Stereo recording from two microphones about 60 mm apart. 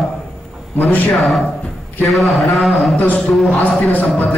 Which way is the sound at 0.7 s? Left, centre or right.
Left.